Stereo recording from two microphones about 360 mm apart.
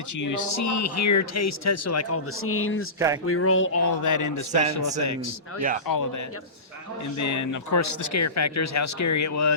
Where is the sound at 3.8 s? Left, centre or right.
Left.